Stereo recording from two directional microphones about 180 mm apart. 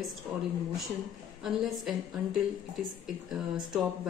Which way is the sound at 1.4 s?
Centre (ahead or behind).